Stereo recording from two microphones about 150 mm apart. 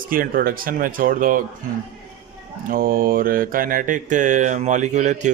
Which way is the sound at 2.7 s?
70° right (ahead or behind).